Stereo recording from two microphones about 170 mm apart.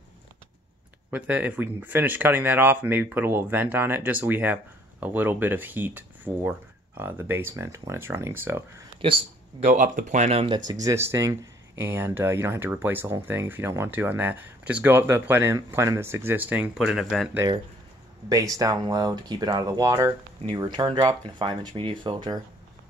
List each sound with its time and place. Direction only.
1.1 s speech: 10° right (ahead or behind)
9.0 s speech: 30° right (ahead or behind)
9.7 s speech: 45° right (ahead or behind)
10.7 s speech: 20° right (ahead or behind); by 17.3 s centre (ahead or behind)
18.3 s speech: 20° right (ahead or behind)
20.4 s speech: 25° right (ahead or behind)